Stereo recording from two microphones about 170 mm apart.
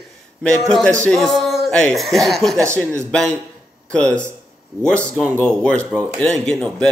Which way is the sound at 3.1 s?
5° left (ahead or behind).